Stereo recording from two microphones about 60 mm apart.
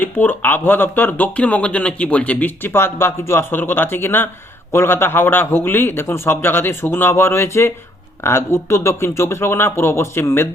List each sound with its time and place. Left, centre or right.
0.0 s speech: left
2.7 s speech: left
3.6 s a man's voice: left